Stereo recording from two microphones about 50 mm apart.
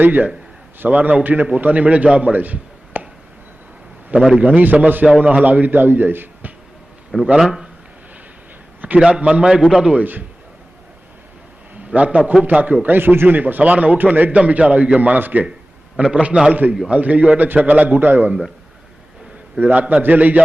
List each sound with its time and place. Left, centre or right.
0.0 s a man's voice: right
2.3 s a sound: right
4.4 s speech: right
5.0 s speech: right
9.0 s a man's voice: centre
10.0 s speech: right
11.9 s a man's voice: right
19.5 s speech: right